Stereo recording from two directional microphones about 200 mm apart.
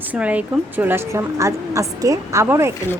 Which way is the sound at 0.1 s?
5° right (ahead or behind).